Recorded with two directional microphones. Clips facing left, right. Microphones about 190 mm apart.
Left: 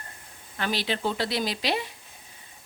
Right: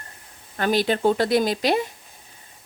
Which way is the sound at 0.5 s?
45° right (ahead or behind).